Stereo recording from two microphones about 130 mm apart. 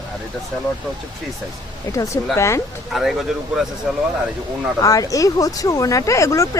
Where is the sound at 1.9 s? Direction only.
25° left (ahead or behind).